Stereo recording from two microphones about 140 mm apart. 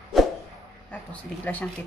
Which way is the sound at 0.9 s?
10° left (ahead or behind).